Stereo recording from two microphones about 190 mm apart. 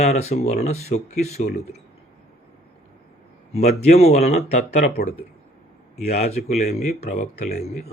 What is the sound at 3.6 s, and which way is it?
Speech, 35° left (ahead or behind).